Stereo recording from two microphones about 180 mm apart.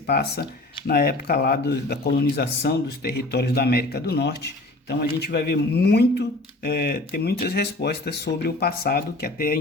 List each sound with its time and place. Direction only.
0.1 s speech: 65° left (ahead or behind)